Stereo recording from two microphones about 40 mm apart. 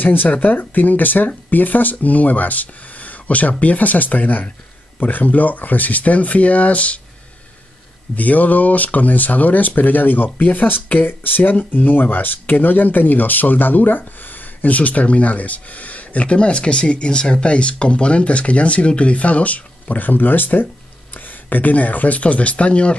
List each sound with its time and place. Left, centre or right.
0.0 s speech: left
8.2 s speech: left